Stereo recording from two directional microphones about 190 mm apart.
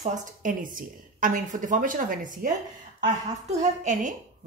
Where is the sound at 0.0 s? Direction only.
40° right (ahead or behind).